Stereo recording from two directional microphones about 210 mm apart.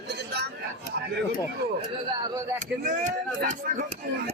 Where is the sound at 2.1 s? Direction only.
20° right (ahead or behind).